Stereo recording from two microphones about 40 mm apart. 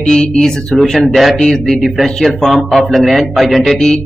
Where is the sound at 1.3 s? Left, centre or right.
Centre.